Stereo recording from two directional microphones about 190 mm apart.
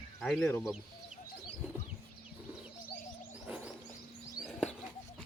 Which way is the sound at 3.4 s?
5° right (ahead or behind).